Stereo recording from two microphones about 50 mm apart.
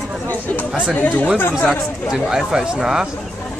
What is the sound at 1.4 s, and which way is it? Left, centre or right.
Speech, left.